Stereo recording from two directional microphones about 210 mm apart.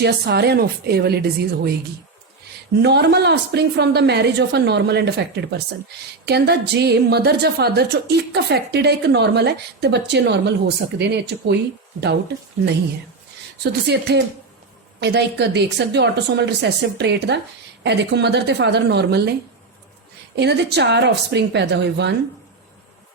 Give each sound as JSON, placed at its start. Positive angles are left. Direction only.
{"t": 0.0, "sound": "a woman's voice", "side_deg": -50}
{"t": 2.8, "sound": "a woman's voice", "side_deg": -55}
{"t": 13.6, "sound": "a woman's voice", "side_deg": -50}